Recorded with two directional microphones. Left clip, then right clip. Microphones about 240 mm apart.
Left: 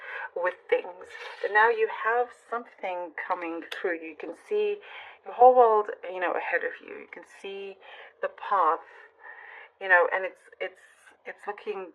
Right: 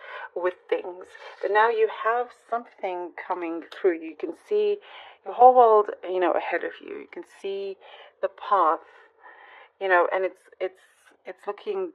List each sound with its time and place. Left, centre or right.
0.0 s speech: right